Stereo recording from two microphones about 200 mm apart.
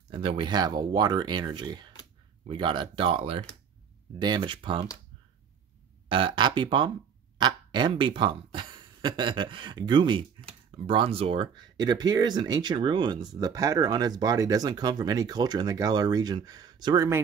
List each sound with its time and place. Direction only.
0.1 s speech: 25° right (ahead or behind)
6.0 s speech: 25° right (ahead or behind)